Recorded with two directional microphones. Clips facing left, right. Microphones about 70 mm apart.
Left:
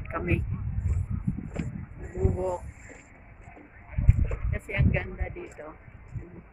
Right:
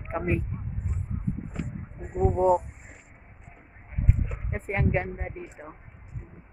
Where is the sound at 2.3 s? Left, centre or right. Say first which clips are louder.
Right 11 dB; right.